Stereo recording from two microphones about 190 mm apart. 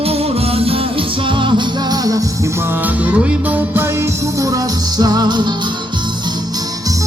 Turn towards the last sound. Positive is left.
turn(degrees=-25)  # may be behind; listen again after turning